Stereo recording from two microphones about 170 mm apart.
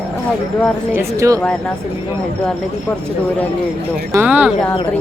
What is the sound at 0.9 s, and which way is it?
Speech, 15° right (ahead or behind).